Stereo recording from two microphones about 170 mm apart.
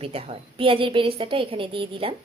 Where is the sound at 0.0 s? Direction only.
35° right (ahead or behind).